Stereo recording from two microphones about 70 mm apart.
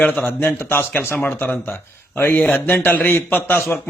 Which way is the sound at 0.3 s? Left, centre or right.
Left.